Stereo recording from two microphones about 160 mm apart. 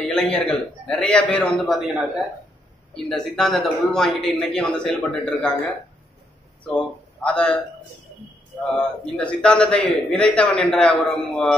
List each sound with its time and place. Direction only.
0.0 s a man's voice: 5° left (ahead or behind)
2.9 s a man's voice: centre (ahead or behind)
7.2 s a man's voice: 5° left (ahead or behind)
8.7 s a man's voice: 5° left (ahead or behind)